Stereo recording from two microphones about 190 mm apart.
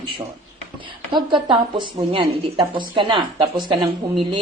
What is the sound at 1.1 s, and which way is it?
A woman's voice, 25° right (ahead or behind).